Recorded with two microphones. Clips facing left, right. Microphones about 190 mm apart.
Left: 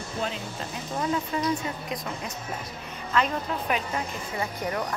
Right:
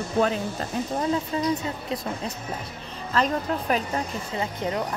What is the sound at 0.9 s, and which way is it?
Speech, 30° right (ahead or behind).